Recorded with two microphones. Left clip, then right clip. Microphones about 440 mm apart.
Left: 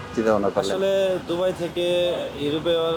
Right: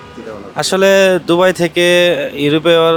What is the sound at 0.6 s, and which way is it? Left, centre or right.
Speech, right.